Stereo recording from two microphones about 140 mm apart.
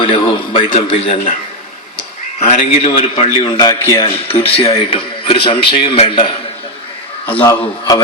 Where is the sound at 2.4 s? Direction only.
55° left (ahead or behind); by 4.0 s 20° left (ahead or behind).